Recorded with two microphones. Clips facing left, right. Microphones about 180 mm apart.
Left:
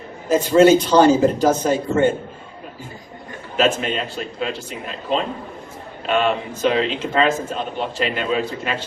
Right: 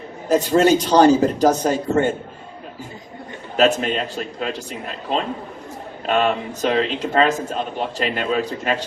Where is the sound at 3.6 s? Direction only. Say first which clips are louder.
Right 2 dB; 40° right (ahead or behind).